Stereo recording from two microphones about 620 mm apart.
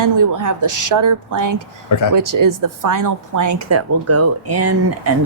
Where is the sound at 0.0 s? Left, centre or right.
Right.